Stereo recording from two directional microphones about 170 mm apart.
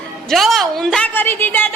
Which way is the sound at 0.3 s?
Centre (ahead or behind).